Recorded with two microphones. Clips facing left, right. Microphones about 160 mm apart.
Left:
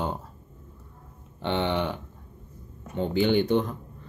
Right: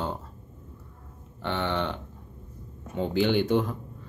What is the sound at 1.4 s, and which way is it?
Speech, 20° left (ahead or behind).